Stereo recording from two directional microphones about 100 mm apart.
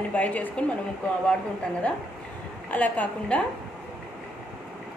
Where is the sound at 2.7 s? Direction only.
15° left (ahead or behind).